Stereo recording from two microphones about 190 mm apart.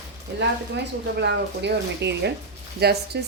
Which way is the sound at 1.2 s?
65° right (ahead or behind).